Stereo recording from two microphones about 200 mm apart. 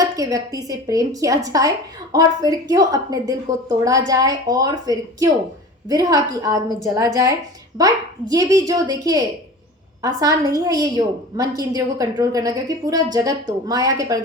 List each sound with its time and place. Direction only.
0.0 s a woman's voice: 15° right (ahead or behind)